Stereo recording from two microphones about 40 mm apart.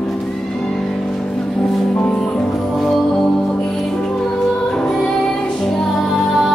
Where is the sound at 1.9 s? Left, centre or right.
Centre.